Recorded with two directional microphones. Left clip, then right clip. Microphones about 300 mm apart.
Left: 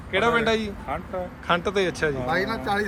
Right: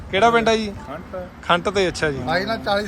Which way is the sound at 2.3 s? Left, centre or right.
Right.